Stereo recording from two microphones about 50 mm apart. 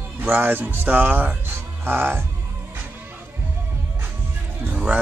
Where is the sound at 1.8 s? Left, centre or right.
Right.